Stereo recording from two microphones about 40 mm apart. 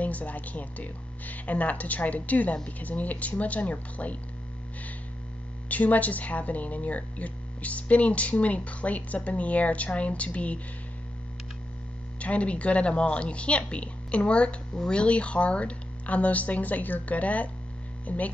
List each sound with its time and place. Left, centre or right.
0.0 s a woman's voice: left
5.7 s a woman's voice: left
12.2 s a woman's voice: left